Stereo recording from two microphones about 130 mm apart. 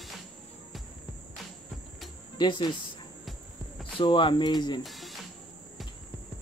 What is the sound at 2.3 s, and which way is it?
Speech, 35° left (ahead or behind).